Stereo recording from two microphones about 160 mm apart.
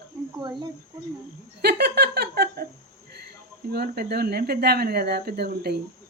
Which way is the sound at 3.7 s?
85° right.